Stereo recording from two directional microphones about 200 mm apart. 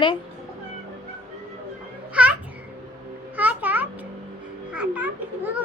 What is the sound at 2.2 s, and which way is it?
Babbling, 5° right (ahead or behind).